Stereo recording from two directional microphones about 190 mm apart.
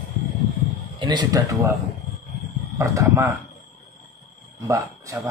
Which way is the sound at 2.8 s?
15° right (ahead or behind).